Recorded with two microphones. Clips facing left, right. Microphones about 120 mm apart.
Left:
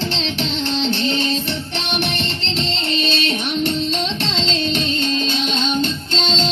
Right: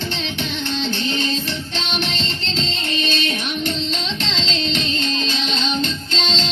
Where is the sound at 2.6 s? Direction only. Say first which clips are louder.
Left 3 dB; 25° left (ahead or behind).